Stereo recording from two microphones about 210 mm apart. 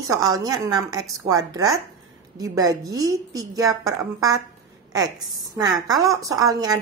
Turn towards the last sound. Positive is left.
turn(degrees=-15)  # may be behind; listen again after turning